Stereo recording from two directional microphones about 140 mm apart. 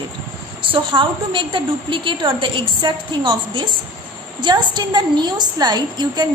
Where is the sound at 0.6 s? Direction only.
40° right (ahead or behind).